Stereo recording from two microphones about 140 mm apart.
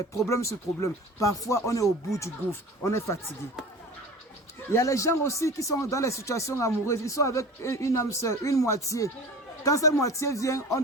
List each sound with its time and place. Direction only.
0.3 s speech: 20° left (ahead or behind)
4.7 s speech: 20° left (ahead or behind)